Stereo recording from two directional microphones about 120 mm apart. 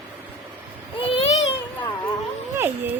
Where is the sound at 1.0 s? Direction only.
50° left (ahead or behind).